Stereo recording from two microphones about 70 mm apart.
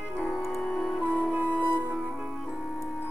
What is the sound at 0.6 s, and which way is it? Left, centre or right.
Music, centre.